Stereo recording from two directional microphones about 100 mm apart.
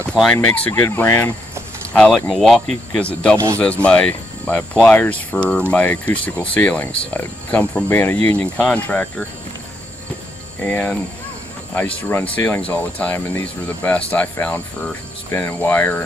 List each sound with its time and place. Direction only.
0.1 s speech: 10° left (ahead or behind)
0.7 s speech: 30° left (ahead or behind)
0.9 s speech: 20° left (ahead or behind)
2.0 s speech: 5° left (ahead or behind)
2.9 s speech: 10° left (ahead or behind)
10.6 s speech: 15° left (ahead or behind)